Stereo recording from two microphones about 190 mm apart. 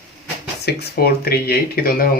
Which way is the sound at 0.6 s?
55° left (ahead or behind).